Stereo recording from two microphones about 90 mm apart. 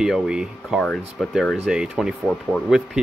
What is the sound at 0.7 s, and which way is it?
Speech, 10° left (ahead or behind).